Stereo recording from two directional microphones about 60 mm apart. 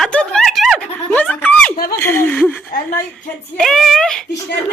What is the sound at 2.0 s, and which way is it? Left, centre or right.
Chuckle, left.